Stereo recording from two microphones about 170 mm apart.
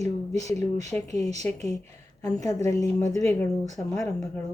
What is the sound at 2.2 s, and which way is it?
Speech, 20° left (ahead or behind).